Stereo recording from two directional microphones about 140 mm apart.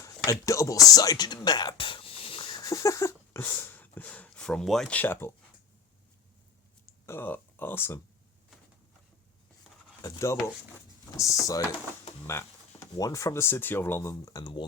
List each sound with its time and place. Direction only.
0.3 s speech: 20° left (ahead or behind)
2.7 s speech: 20° left (ahead or behind)
7.0 s speech: 15° left (ahead or behind)
10.0 s speech: 20° left (ahead or behind)